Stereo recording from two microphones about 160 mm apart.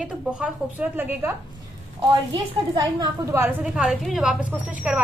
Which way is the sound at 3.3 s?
10° right (ahead or behind).